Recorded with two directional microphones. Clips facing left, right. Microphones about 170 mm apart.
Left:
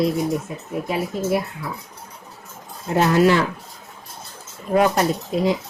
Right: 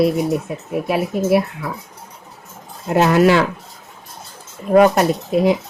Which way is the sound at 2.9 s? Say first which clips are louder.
Right 3 dB; 70° right (ahead or behind).